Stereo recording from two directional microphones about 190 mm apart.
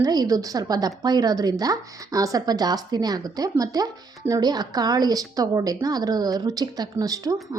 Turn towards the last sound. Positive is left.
turn(degrees=-20)  # may be behind; listen again after turning